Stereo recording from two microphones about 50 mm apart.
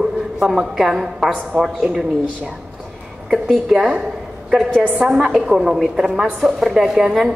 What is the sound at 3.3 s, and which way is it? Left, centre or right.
Speech, centre.